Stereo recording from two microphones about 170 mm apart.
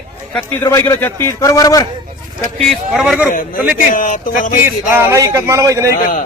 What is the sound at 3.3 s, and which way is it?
Speech, 55° left (ahead or behind).